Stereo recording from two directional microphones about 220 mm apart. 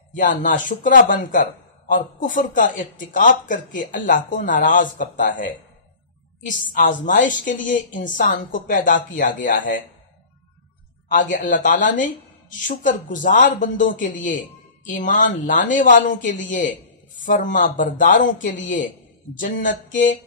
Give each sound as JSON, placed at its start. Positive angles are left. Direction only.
{"t": 0.1, "sound": "a man's voice", "side_deg": 35}
{"t": 11.3, "sound": "a man's voice", "side_deg": 35}